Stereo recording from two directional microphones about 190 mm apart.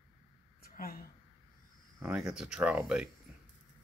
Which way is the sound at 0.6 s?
50° left (ahead or behind).